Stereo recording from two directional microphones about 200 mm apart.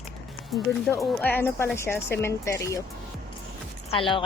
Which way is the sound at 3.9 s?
25° left (ahead or behind).